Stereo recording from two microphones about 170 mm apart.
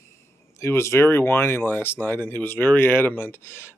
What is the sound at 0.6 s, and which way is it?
Speech, 15° left (ahead or behind).